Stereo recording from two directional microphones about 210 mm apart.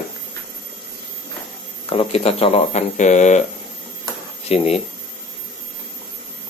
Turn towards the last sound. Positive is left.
turn(degrees=30)  # may be behind; listen again after turning